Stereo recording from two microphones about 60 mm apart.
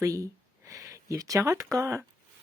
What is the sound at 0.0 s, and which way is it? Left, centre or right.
Speech, right.